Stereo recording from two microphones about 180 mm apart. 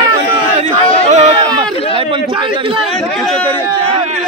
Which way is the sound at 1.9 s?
30° right (ahead or behind).